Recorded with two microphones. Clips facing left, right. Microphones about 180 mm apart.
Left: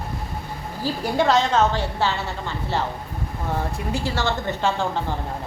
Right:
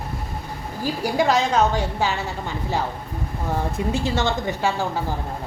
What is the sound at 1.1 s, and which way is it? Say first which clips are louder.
A woman's voice: left 1 dB; 10° right (ahead or behind).